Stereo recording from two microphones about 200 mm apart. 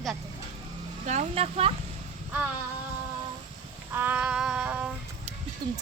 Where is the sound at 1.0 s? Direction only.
35° right (ahead or behind).